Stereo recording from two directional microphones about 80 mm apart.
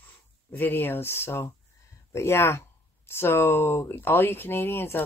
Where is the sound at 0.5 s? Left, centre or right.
Left.